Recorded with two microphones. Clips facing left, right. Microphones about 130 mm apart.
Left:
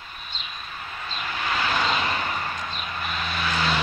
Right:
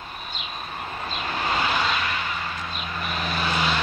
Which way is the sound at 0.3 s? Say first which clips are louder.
Right 3 dB; 50° right (ahead or behind).